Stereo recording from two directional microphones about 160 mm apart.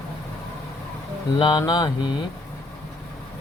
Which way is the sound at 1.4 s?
25° left (ahead or behind).